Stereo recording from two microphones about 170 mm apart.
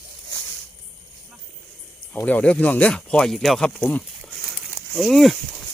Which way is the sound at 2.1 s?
10° left (ahead or behind).